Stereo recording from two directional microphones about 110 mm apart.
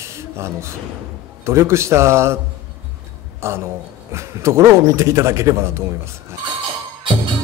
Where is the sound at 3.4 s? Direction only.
25° right (ahead or behind).